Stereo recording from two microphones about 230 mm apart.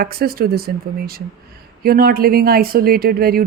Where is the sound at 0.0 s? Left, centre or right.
Right.